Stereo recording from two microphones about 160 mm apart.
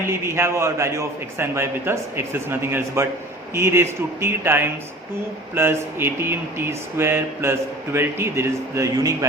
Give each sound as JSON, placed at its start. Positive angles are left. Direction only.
{"t": 0.0, "sound": "a man's voice", "side_deg": -15}